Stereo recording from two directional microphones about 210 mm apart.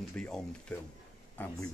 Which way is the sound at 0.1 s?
5° left (ahead or behind).